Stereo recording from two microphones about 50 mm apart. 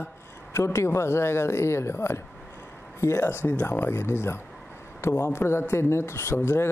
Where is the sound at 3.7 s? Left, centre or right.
Left.